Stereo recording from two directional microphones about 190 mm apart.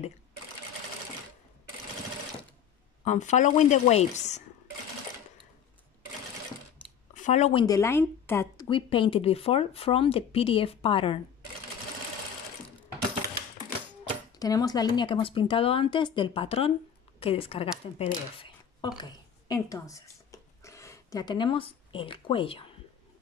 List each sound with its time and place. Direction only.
3.0 s a woman's voice: 40° left (ahead or behind)
7.2 s speech: 40° left (ahead or behind)
7.6 s speech: 15° left (ahead or behind)
8.6 s speech: 25° left (ahead or behind)
14.3 s a woman's voice: 20° left (ahead or behind)